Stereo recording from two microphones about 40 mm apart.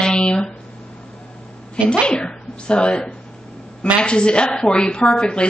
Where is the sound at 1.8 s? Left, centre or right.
Left.